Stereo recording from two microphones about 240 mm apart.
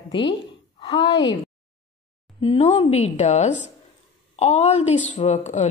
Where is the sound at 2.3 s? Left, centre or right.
Left.